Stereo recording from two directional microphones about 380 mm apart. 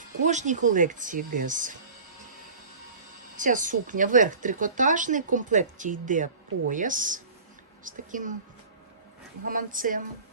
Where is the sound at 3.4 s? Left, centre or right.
Centre.